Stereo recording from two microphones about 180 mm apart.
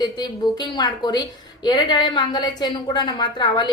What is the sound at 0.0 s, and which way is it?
A woman's voice, 25° left (ahead or behind).